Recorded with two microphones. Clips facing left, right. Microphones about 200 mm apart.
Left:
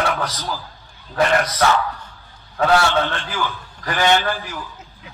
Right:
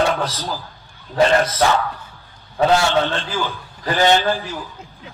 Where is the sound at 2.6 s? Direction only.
20° right (ahead or behind).